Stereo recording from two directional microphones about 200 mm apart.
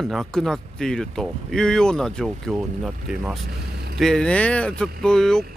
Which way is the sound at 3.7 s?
55° right (ahead or behind).